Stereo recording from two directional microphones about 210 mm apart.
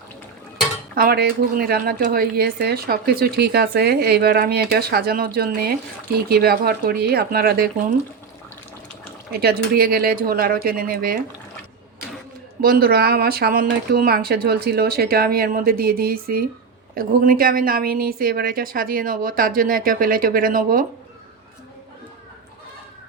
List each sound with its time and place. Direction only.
0.9 s speech: 45° right (ahead or behind)
9.3 s speech: 50° right (ahead or behind)
12.6 s speech: 45° right (ahead or behind)